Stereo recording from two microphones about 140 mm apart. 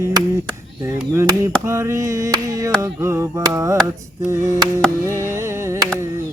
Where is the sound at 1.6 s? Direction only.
20° right (ahead or behind).